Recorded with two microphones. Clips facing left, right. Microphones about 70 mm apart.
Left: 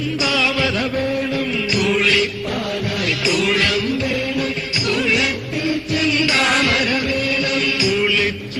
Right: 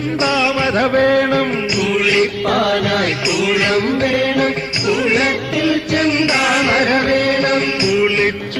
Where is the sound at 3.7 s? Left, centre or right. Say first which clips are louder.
Right 5 dB; right.